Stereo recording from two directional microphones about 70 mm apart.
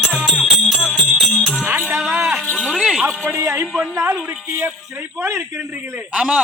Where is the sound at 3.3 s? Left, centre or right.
Right.